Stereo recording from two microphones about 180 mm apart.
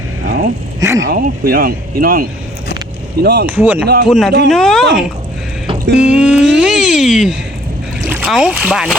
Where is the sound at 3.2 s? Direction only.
65° right (ahead or behind).